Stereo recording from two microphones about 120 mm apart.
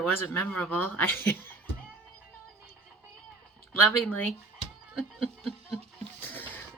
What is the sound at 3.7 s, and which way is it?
Speech, 15° left (ahead or behind).